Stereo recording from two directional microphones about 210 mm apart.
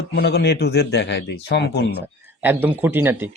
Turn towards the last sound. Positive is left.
turn(degrees=-10)  # may be behind; listen again after turning